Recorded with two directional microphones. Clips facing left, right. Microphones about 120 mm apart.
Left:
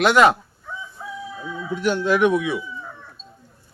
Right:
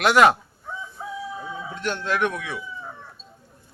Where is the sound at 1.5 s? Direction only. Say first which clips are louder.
Left 2 dB; 25° right (ahead or behind).